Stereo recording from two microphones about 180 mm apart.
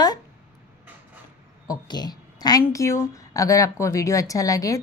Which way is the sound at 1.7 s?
25° left (ahead or behind).